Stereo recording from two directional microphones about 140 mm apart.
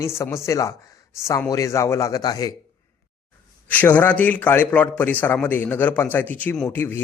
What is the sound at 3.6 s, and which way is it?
A man's voice, 10° left (ahead or behind).